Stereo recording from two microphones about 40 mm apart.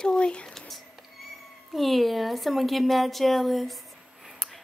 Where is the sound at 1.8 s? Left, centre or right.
Centre.